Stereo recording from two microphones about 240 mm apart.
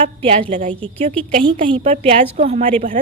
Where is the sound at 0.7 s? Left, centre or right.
Centre.